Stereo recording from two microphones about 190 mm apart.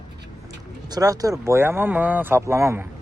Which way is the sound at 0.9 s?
20° right (ahead or behind).